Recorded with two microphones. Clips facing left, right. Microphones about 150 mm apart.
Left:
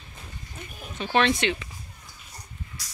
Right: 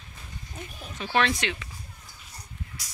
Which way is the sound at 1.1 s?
Centre (ahead or behind).